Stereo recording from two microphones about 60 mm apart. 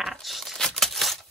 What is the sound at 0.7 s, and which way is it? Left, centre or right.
Tearing, centre.